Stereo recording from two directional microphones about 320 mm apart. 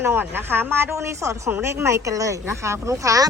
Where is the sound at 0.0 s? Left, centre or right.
Centre.